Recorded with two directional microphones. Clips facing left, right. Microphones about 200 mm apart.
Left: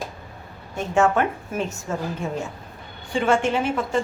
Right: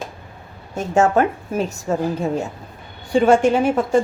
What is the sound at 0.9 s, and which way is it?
A woman's voice, 40° right (ahead or behind).